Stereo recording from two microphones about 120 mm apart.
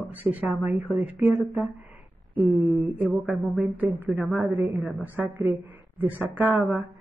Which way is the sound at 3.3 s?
15° right (ahead or behind).